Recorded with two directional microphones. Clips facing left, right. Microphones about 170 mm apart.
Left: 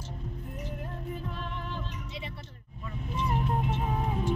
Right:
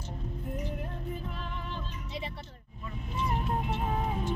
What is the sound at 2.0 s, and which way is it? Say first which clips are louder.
Music: right 2 dB; 35° right (ahead or behind).